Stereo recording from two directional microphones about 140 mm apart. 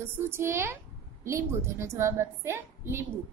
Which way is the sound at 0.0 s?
15° right (ahead or behind).